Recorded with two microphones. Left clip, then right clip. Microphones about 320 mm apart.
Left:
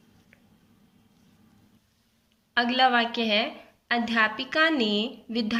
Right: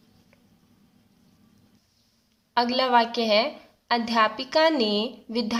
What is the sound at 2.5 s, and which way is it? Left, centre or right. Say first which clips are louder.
A woman's voice: even; centre.